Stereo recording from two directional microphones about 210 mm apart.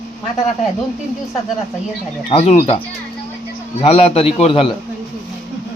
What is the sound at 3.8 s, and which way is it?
Speech, 30° left (ahead or behind).